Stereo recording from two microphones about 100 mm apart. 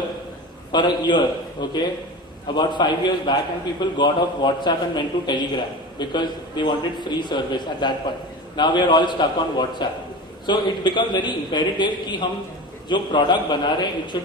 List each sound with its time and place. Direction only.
0.7 s a man's voice: 50° left (ahead or behind)